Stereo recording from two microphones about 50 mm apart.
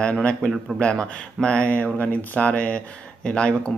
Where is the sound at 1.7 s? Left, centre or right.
Left.